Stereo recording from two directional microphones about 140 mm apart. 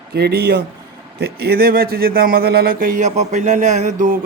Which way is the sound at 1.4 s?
90° right.